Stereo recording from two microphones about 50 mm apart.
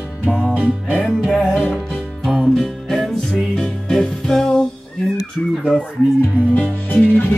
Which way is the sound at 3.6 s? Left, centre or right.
Centre.